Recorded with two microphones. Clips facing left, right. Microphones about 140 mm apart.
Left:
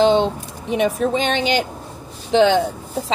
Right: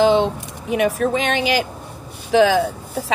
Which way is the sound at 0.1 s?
30° left (ahead or behind).